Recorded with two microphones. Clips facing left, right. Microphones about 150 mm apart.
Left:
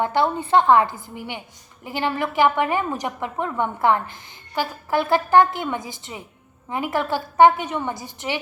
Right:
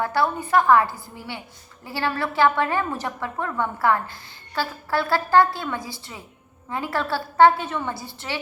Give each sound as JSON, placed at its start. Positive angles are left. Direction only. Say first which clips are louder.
{"t": 0.0, "sound": "a woman's voice", "louder": "left 2 dB", "side_deg": 20}